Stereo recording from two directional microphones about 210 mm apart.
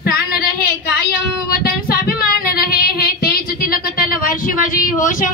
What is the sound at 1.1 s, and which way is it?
Child singing, 45° left (ahead or behind).